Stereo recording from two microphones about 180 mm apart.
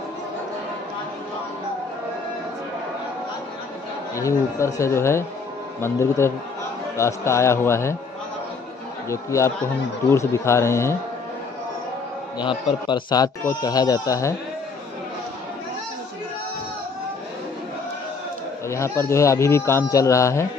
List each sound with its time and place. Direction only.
4.1 s speech: 15° left (ahead or behind)
9.1 s speech: 15° left (ahead or behind)
12.4 s speech: 25° left (ahead or behind)
18.7 s speech: 15° left (ahead or behind)